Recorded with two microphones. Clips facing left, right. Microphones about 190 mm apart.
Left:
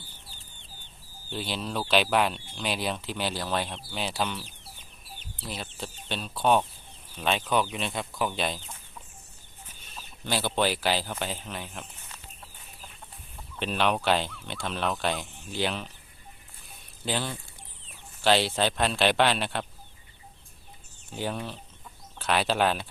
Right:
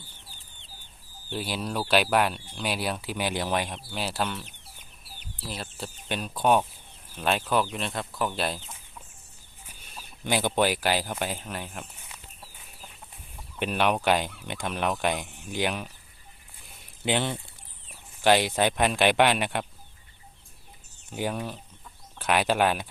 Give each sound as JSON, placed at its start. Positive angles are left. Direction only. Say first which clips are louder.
{"t": 0.3, "sound": "chicken", "louder": "even", "side_deg": -15}
{"t": 1.3, "sound": "speech", "louder": "right 1 dB", "side_deg": -10}
{"t": 9.6, "sound": "a sound", "louder": "right 1 dB", "side_deg": -10}
{"t": 13.6, "sound": "speech", "louder": "right 1 dB", "side_deg": -10}
{"t": 17.1, "sound": "speech", "louder": "right 4 dB", "side_deg": -20}
{"t": 21.1, "sound": "speech", "louder": "right 2 dB", "side_deg": -10}